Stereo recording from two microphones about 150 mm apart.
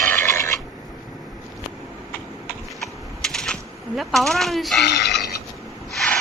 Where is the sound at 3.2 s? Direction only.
5° left (ahead or behind).